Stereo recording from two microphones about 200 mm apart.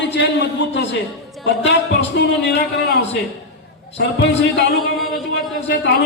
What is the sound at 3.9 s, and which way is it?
Speech, 65° left (ahead or behind).